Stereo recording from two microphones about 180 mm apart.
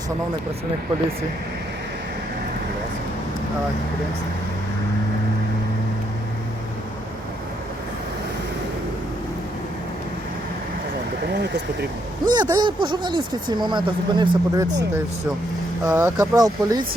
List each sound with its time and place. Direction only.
11.3 s speech: 70° right (ahead or behind)
12.2 s speech: 25° right (ahead or behind)